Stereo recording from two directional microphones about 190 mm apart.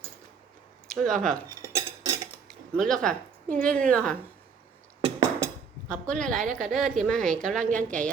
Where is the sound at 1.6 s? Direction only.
15° right (ahead or behind).